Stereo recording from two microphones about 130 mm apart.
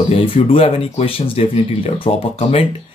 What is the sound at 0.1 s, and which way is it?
Speech, 45° left (ahead or behind).